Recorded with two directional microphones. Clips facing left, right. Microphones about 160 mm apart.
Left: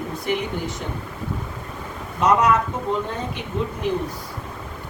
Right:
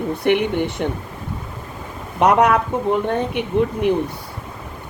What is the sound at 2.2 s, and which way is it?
Speech, 60° right (ahead or behind).